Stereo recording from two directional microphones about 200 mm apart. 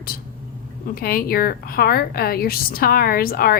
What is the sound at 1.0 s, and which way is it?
A woman's voice, 45° left (ahead or behind).